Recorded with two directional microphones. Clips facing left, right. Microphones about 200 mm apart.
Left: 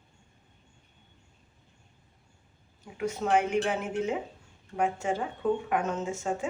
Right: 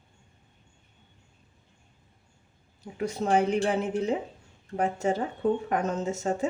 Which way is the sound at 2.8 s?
35° right (ahead or behind).